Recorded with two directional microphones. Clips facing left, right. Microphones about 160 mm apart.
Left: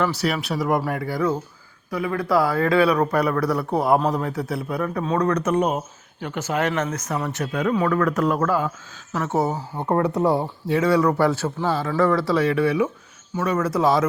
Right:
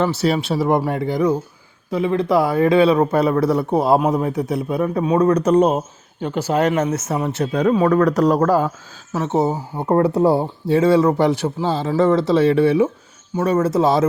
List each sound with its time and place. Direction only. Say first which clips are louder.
0.0 s speech: right 4 dB; 25° right (ahead or behind)
5.4 s speech: right 6 dB; 35° right (ahead or behind)
9.1 s speech: right 4 dB; 20° right (ahead or behind)